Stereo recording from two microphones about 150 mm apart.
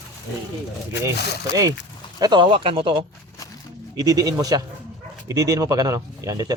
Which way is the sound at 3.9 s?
25° right (ahead or behind).